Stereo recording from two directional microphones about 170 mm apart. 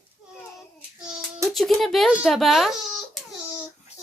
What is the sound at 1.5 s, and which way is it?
Speech, centre (ahead or behind).